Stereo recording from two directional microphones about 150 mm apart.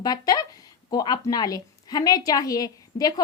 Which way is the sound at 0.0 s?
25° left (ahead or behind).